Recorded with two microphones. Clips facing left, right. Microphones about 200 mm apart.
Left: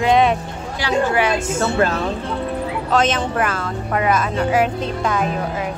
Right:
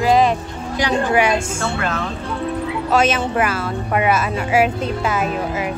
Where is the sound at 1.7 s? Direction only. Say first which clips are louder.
Left 7 dB; 35° left (ahead or behind).